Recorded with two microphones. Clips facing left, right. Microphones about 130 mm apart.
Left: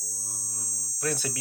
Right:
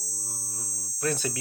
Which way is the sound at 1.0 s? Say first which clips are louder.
Right 2 dB; 10° left (ahead or behind).